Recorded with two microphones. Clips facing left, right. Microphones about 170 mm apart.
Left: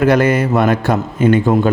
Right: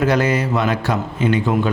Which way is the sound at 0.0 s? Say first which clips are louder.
Left 5 dB; 55° left (ahead or behind).